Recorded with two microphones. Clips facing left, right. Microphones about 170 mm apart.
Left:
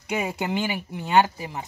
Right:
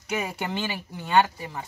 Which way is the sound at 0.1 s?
15° left (ahead or behind).